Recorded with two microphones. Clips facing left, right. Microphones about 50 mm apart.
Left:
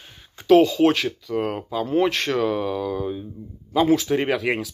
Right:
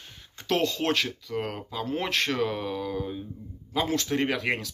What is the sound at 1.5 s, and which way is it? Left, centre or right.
Speech, centre.